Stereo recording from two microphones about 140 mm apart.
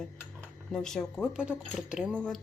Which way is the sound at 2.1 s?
5° left (ahead or behind).